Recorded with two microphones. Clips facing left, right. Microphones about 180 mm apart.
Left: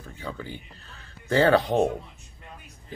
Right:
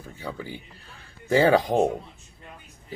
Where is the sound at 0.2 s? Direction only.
10° right (ahead or behind).